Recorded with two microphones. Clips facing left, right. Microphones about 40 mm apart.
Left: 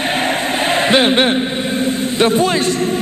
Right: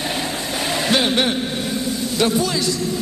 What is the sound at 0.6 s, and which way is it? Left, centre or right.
A man's voice, left.